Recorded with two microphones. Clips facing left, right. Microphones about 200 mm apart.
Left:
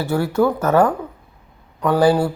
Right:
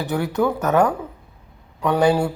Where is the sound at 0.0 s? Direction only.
20° right (ahead or behind).